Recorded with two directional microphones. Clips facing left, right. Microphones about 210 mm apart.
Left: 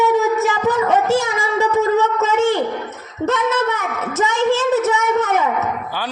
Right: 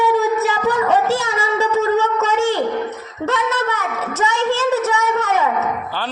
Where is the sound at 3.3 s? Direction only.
20° left (ahead or behind).